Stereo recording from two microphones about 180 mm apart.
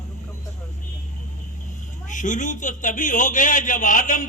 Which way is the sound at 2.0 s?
45° left (ahead or behind).